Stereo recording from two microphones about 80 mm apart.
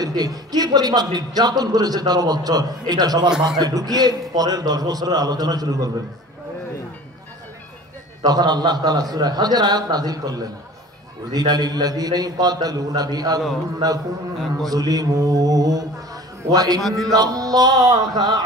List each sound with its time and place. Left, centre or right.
0.0 s a man's voice: right
8.2 s a man's voice: right
13.7 s mantra: right
16.8 s a man's voice: centre
17.1 s mantra: right